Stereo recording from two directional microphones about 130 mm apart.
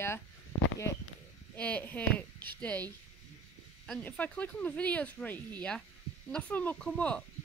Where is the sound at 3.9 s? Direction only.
10° left (ahead or behind).